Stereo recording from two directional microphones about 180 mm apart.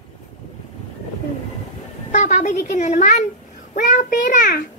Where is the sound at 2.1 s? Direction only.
40° left (ahead or behind).